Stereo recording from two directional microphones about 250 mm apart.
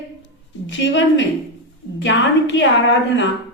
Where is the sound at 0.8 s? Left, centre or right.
Left.